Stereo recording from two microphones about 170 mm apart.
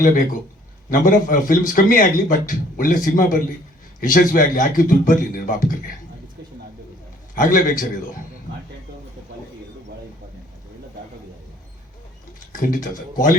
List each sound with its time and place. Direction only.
0.9 s speech: 50° left (ahead or behind)
7.3 s speech: 50° left (ahead or behind)
12.5 s speech: 50° left (ahead or behind)